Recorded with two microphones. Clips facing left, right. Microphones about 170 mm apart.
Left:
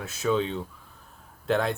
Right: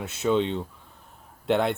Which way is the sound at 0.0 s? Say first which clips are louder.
Right 2 dB; 25° right (ahead or behind).